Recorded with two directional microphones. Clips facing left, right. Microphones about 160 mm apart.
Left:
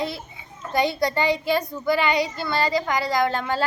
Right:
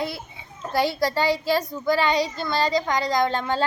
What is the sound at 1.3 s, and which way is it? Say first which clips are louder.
A woman's voice: even; 15° left (ahead or behind).